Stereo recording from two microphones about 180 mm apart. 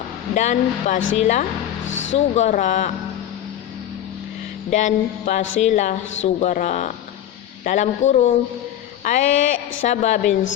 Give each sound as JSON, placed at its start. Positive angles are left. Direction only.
{"t": 0.3, "sound": "speech", "side_deg": 40}
{"t": 1.9, "sound": "speech", "side_deg": 90}
{"t": 2.1, "sound": "speech", "side_deg": 40}
{"t": 4.7, "sound": "a sound", "side_deg": 45}
{"t": 5.5, "sound": "speech", "side_deg": 40}
{"t": 9.0, "sound": "a sound", "side_deg": 45}
{"t": 9.8, "sound": "speech", "side_deg": 40}